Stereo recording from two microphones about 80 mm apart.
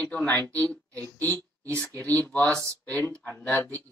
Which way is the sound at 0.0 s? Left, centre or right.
Centre.